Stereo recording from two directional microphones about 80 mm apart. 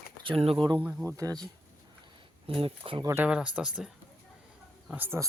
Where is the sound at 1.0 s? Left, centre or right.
Right.